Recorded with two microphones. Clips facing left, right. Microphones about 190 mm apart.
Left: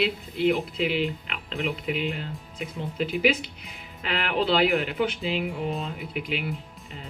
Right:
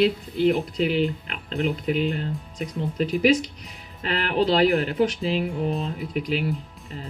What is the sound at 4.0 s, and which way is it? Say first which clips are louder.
Speech: right 3 dB; 35° right (ahead or behind).